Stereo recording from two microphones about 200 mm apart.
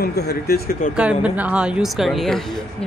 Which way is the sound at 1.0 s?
5° right (ahead or behind).